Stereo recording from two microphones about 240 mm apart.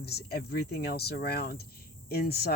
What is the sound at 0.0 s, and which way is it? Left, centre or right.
Speech, left.